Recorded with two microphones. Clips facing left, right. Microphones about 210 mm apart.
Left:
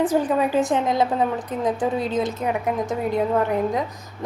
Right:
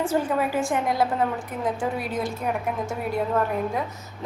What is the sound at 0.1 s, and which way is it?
A woman's voice, 15° left (ahead or behind).